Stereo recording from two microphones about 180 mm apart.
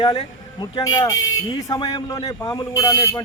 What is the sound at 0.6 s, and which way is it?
Speech, 20° left (ahead or behind).